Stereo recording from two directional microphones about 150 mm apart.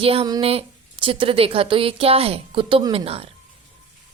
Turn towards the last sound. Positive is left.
turn(degrees=-40)  # may be behind; listen again after turning